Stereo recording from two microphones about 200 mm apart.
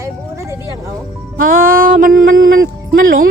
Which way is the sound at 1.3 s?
45° right (ahead or behind).